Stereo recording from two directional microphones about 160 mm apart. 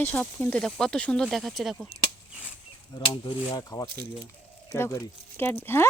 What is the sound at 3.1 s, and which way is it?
Speech, 20° left (ahead or behind).